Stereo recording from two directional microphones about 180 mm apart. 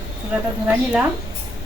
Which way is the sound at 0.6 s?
10° right (ahead or behind).